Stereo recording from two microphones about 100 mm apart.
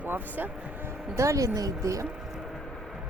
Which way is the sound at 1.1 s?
30° right (ahead or behind).